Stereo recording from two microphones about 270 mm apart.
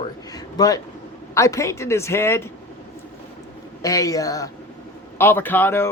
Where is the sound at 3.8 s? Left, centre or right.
Centre.